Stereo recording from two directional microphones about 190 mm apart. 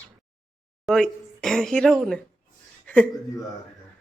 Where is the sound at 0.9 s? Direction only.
5° left (ahead or behind).